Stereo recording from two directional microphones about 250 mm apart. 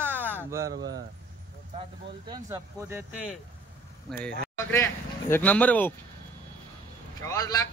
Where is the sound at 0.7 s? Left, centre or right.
Right.